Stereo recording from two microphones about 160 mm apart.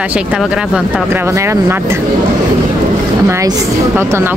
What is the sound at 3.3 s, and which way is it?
Speech, 20° right (ahead or behind).